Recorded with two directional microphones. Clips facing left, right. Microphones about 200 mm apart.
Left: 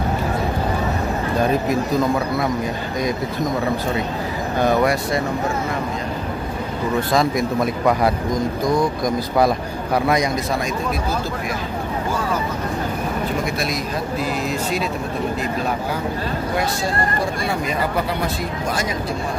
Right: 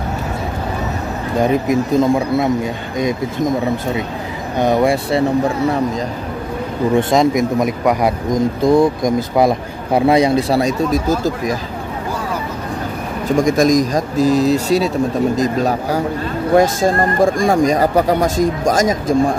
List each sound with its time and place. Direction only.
1.4 s speech: 20° right (ahead or behind)
4.6 s speech: 25° right (ahead or behind)
7.0 s speech: 20° right (ahead or behind); by 11.5 s 45° right (ahead or behind)
13.5 s speech: 45° right (ahead or behind)